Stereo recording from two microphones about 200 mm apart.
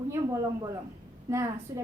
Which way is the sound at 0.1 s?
15° right (ahead or behind).